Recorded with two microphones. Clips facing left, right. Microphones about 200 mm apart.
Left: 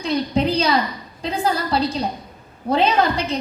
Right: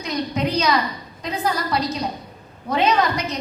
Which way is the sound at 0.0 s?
30° left (ahead or behind).